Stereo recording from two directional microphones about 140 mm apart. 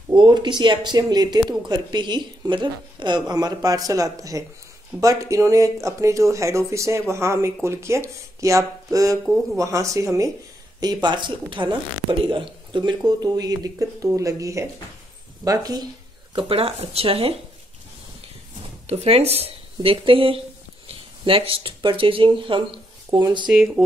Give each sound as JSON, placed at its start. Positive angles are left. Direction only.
{"t": 0.1, "sound": "a woman's voice", "side_deg": -35}
{"t": 16.3, "sound": "speech", "side_deg": -40}
{"t": 18.9, "sound": "speech", "side_deg": -45}
{"t": 23.4, "sound": "speech", "side_deg": -5}